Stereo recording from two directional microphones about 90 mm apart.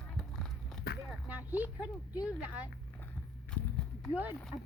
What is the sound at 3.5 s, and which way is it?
Horse, 10° left (ahead or behind).